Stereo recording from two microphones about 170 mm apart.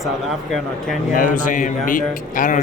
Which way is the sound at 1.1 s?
50° left (ahead or behind).